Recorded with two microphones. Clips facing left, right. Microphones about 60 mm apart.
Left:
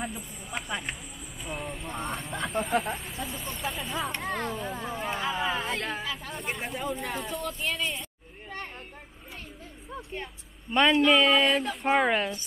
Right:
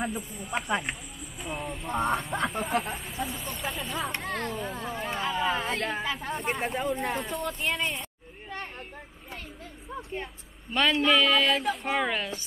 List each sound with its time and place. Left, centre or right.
0.0 s speech: centre
1.4 s speech: centre
9.8 s speech: centre
10.7 s speech: left
11.1 s speech: centre
11.6 s speech: centre
11.9 s speech: centre